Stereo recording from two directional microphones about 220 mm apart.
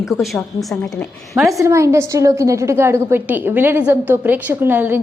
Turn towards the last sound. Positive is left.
turn(degrees=-10)  # may be behind; listen again after turning